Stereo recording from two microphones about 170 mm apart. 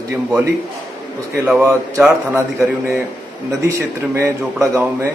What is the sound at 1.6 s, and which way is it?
A man's voice, 15° right (ahead or behind).